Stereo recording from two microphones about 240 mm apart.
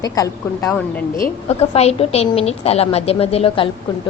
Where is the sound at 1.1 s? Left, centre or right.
Left.